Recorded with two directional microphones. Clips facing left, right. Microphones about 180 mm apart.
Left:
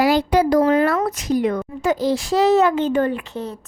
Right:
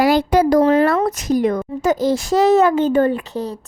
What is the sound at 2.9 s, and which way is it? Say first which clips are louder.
Speech: right 4 dB; 30° right (ahead or behind).